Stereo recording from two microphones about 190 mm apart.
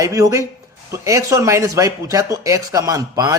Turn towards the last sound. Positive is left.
turn(degrees=-20)  # may be behind; listen again after turning